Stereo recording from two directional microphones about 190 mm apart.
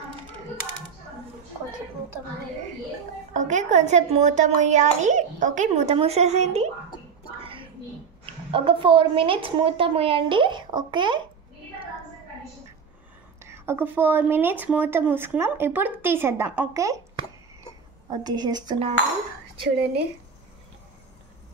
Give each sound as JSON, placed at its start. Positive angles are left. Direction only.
{"t": 3.3, "sound": "a child's voice", "side_deg": -40}
{"t": 7.4, "sound": "a sound", "side_deg": -25}
{"t": 8.5, "sound": "a woman's voice", "side_deg": -30}
{"t": 13.4, "sound": "a woman's voice", "side_deg": -15}